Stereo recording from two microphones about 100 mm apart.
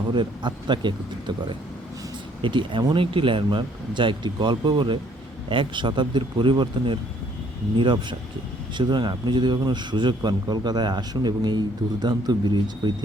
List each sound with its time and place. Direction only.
0.1 s speech: 50° right (ahead or behind)
8.8 s speech: 50° right (ahead or behind)